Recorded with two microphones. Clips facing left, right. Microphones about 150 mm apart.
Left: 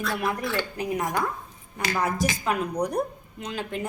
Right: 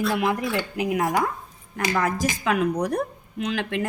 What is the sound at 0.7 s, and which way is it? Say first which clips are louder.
Speech: right 4 dB; 90° right.